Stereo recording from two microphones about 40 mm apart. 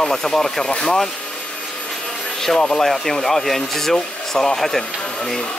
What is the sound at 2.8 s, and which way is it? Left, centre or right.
Speech, centre.